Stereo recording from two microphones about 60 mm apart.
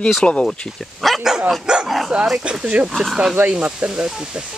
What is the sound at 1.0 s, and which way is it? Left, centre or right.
Dog, centre.